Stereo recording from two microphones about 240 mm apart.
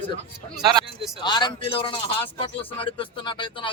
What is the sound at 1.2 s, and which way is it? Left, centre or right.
Speech, centre.